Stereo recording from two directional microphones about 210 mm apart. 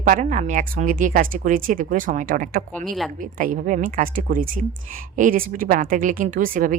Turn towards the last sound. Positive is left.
turn(degrees=-40)  # may be behind; listen again after turning